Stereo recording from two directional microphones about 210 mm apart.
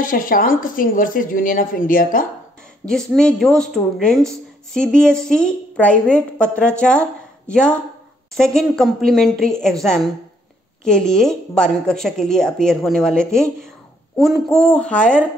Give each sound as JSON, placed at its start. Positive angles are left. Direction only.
{"t": 0.0, "sound": "a woman's voice", "side_deg": 40}
{"t": 2.9, "sound": "a woman's voice", "side_deg": 5}